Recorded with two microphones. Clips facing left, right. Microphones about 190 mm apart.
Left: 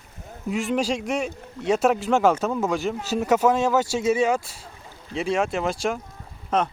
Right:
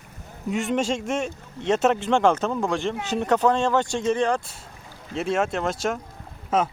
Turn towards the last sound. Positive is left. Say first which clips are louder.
# right 1 dB
turn(degrees=-5)  # may be behind; listen again after turning